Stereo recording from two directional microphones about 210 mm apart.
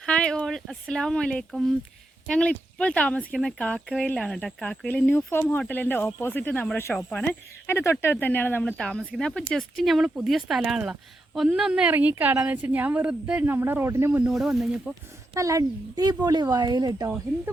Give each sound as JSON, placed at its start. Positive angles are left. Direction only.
{"t": 0.0, "sound": "a woman's voice", "side_deg": 5}
{"t": 15.4, "sound": "a woman's voice", "side_deg": -15}